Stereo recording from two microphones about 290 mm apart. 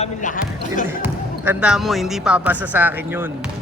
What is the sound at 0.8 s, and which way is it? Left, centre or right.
A man's voice, centre.